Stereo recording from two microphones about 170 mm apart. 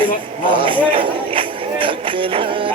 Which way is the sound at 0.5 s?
30° right (ahead or behind).